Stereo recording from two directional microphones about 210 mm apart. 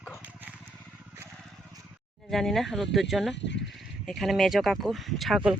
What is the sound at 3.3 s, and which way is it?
Speech, 55° left (ahead or behind).